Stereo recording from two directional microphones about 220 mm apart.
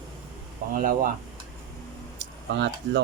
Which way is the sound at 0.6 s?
35° right (ahead or behind).